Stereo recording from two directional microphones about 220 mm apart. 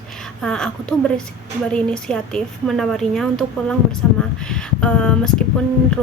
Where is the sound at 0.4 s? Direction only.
5° left (ahead or behind).